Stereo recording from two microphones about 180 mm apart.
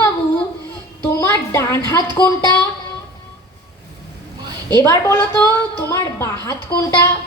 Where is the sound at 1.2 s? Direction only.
15° left (ahead or behind).